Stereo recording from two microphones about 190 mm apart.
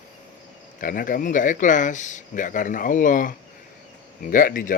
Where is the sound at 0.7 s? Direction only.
45° left (ahead or behind).